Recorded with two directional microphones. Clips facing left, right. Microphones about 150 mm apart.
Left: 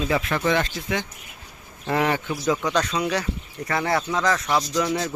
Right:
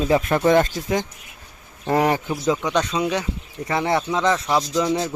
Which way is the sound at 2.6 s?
20° right (ahead or behind).